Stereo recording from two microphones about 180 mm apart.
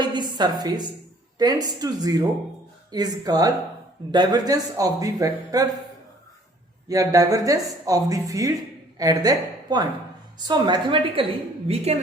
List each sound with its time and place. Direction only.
0.0 s a sound: 25° right (ahead or behind)
0.6 s speech: 20° right (ahead or behind)
6.8 s a woman's voice: 20° right (ahead or behind); by 11.8 s 35° right (ahead or behind)